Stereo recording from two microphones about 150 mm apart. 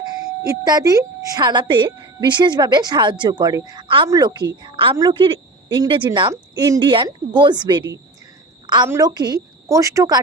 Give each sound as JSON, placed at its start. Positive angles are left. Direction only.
{"t": 0.4, "sound": "a woman's voice", "side_deg": -25}
{"t": 8.6, "sound": "a sound", "side_deg": -30}
{"t": 8.9, "sound": "a woman's voice", "side_deg": -25}